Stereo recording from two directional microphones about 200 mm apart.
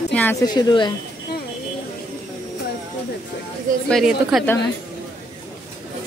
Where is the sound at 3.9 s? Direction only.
Centre (ahead or behind).